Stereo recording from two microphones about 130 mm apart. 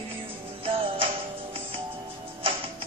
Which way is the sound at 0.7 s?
45° right (ahead or behind).